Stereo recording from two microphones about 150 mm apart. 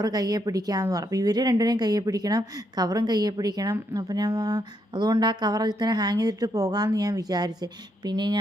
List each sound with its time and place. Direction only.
0.0 s speech: 25° right (ahead or behind)